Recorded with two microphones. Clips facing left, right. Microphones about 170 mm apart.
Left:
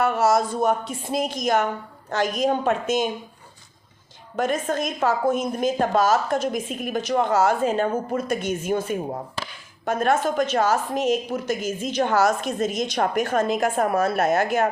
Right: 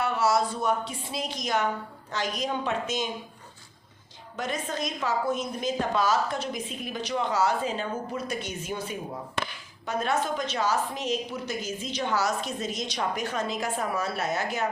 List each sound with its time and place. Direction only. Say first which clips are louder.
0.0 s a woman's voice: left 5 dB; 45° left (ahead or behind)
4.4 s a woman's voice: left 8 dB; 50° left (ahead or behind)